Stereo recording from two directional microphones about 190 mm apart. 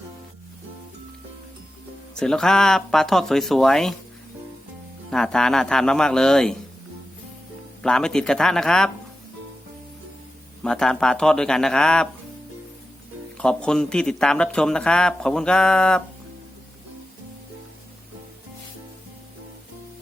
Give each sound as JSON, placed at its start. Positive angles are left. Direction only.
{"t": 2.1, "sound": "speech", "side_deg": 5}
{"t": 5.1, "sound": "speech", "side_deg": 5}
{"t": 7.8, "sound": "speech", "side_deg": 5}
{"t": 10.6, "sound": "speech", "side_deg": 5}
{"t": 13.3, "sound": "speech", "side_deg": 5}